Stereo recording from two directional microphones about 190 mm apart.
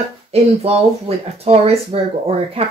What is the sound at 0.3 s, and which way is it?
Speech, 35° right (ahead or behind).